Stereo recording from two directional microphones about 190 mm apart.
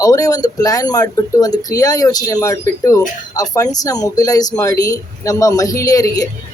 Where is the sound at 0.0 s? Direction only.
20° left (ahead or behind).